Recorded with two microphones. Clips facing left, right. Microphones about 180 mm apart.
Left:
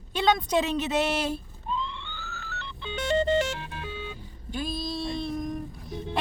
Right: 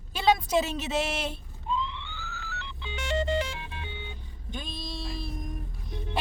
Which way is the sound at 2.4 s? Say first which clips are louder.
Left 2 dB; 60° left (ahead or behind).